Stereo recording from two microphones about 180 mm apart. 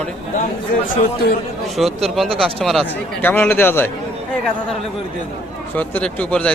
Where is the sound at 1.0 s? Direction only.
55° left (ahead or behind).